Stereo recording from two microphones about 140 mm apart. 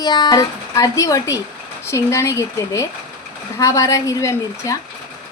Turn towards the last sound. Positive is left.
turn(degrees=20)  # may be behind; listen again after turning